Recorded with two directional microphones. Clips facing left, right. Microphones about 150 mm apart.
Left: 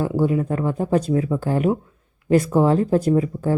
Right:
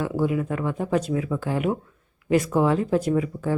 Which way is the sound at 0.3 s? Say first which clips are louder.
Left 4 dB; 35° left (ahead or behind).